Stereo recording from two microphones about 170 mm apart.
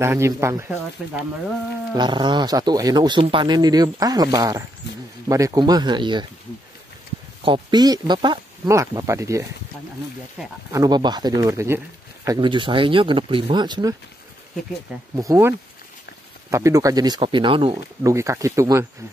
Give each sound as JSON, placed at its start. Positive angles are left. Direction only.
{"t": 0.0, "sound": "speech", "side_deg": -15}
{"t": 2.0, "sound": "speech", "side_deg": -25}
{"t": 7.4, "sound": "speech", "side_deg": -25}
{"t": 10.7, "sound": "speech", "side_deg": -20}
{"t": 12.3, "sound": "speech", "side_deg": -30}
{"t": 15.1, "sound": "speech", "side_deg": -15}
{"t": 18.0, "sound": "speech", "side_deg": -15}